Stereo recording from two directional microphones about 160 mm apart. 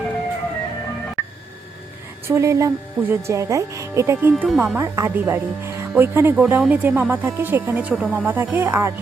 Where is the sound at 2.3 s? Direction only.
15° right (ahead or behind).